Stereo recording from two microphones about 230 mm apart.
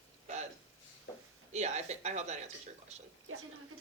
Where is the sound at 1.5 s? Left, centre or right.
Right.